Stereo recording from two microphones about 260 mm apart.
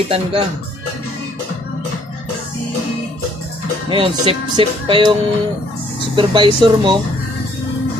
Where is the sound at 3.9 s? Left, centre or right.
Centre.